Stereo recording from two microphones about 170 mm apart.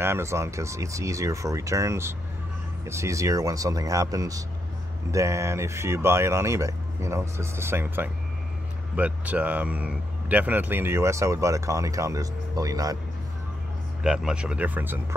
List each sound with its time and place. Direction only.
0.0 s speech: 15° right (ahead or behind)
14.0 s speech: 5° right (ahead or behind)